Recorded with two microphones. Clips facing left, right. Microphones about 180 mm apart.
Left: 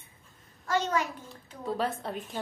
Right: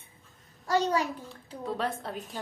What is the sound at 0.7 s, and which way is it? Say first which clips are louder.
Speech: right 2 dB; 35° right (ahead or behind).